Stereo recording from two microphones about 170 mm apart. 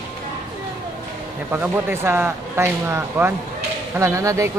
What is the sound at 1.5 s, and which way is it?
Speech, 10° right (ahead or behind).